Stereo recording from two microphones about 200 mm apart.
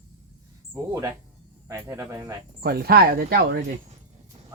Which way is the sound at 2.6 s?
50° right (ahead or behind).